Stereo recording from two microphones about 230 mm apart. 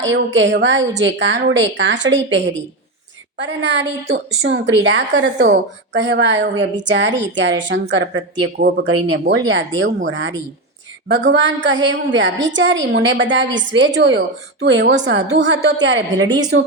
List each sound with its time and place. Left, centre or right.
0.0 s a woman's voice: right